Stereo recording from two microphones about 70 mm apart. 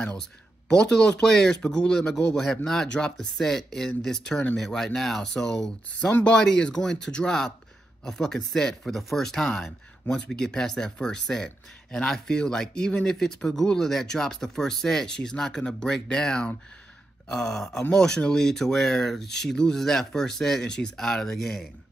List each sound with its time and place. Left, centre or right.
0.7 s speech: centre